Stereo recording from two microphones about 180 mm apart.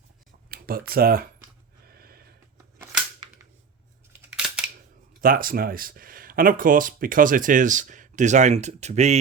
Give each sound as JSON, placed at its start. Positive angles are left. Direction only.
{"t": 0.5, "sound": "speech", "side_deg": -55}
{"t": 2.0, "sound": "a sound", "side_deg": -55}
{"t": 4.4, "sound": "camera", "side_deg": 0}
{"t": 5.2, "sound": "speech", "side_deg": -50}